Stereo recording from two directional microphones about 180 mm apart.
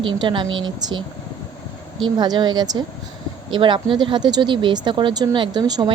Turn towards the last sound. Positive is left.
turn(degrees=-25)  # may be behind; listen again after turning